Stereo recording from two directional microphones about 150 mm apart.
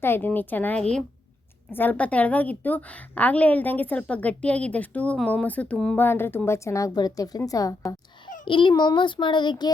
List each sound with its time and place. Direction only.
0.0 s a woman's voice: 15° left (ahead or behind)
8.4 s child singing: 35° left (ahead or behind)